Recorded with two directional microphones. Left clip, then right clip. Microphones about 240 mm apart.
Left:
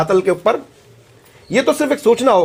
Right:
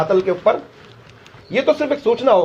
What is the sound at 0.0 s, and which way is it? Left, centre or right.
Speech, left.